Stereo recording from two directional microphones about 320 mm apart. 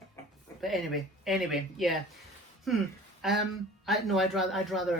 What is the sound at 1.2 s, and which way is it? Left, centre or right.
Speech, centre.